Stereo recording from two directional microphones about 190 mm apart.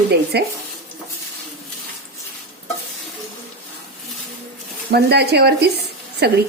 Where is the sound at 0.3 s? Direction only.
60° right (ahead or behind).